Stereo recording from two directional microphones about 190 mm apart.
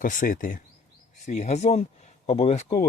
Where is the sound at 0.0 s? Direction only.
45° left (ahead or behind).